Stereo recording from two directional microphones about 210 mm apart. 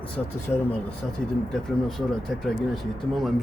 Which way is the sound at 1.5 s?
Centre (ahead or behind).